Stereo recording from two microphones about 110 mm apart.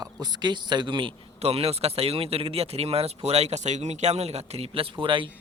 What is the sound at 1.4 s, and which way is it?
Speech, 65° right (ahead or behind).